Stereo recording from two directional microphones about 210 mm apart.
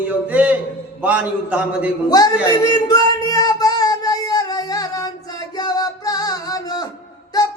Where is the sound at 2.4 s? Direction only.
15° left (ahead or behind).